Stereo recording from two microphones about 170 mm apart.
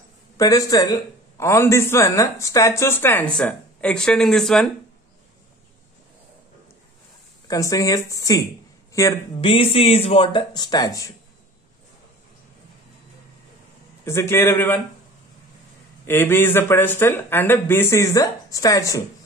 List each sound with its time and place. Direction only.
0.4 s a man's voice: 20° left (ahead or behind); by 4.6 s centre (ahead or behind)
7.4 s speech: 20° left (ahead or behind)
9.4 s speech: 30° left (ahead or behind)
14.0 s a man's voice: 15° left (ahead or behind)
16.1 s a man's voice: 15° left (ahead or behind)